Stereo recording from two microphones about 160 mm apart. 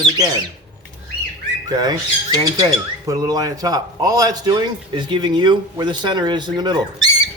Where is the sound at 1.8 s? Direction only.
25° right (ahead or behind).